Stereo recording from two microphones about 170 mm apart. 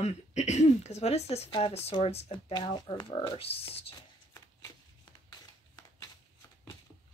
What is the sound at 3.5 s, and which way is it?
Speech, 35° left (ahead or behind).